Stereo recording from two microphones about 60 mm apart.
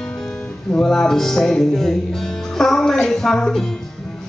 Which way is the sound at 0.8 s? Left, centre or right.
Centre.